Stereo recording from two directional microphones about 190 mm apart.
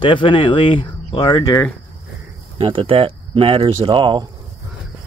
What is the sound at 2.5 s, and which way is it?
Speech, 30° right (ahead or behind).